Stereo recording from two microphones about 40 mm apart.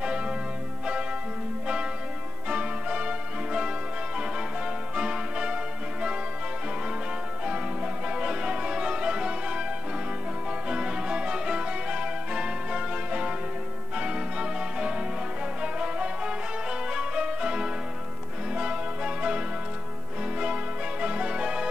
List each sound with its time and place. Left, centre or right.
0.0 s music: right
2.4 s music: right
7.4 s music: right
10.7 s music: right